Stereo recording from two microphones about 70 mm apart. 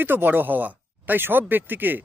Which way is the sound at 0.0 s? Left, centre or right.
Right.